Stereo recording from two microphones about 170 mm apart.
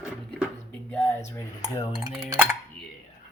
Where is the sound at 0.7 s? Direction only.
10° left (ahead or behind).